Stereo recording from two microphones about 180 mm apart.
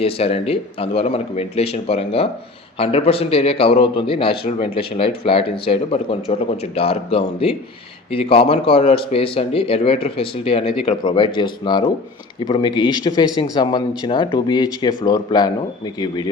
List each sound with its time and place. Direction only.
0.0 s a man's voice: 35° left (ahead or behind)